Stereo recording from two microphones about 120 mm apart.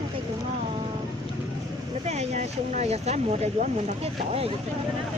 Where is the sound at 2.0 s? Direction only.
65° right (ahead or behind).